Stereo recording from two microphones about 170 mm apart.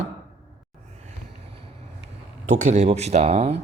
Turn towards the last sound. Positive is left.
turn(degrees=-40)  # may be behind; listen again after turning